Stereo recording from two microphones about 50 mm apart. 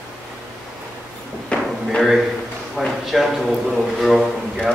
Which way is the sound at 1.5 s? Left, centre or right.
Left.